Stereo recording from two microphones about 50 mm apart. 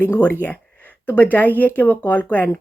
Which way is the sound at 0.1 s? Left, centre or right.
Left.